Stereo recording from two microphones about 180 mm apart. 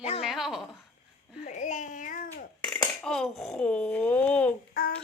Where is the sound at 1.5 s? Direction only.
40° left (ahead or behind).